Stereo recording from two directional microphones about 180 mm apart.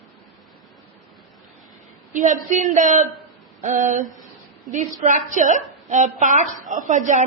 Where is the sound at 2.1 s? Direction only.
45° right (ahead or behind).